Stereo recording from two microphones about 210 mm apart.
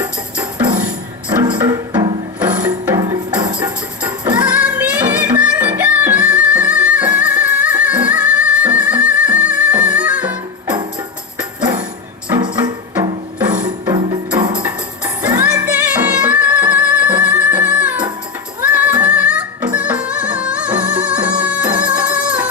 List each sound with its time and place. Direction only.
1.4 s music: 20° right (ahead or behind)
3.0 s music: 20° right (ahead or behind)
4.5 s music: 5° right (ahead or behind)
12.3 s music: 20° right (ahead or behind)
15.4 s music: 5° right (ahead or behind)